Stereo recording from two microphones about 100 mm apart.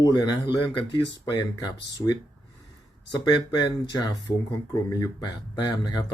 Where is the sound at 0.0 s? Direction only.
40° left (ahead or behind).